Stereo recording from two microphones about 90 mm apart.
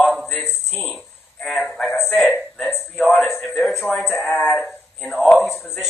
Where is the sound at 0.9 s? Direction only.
Centre (ahead or behind).